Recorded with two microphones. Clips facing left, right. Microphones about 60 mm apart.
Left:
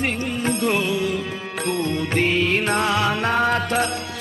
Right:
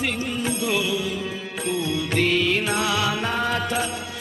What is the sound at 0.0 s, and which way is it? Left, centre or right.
Music, left.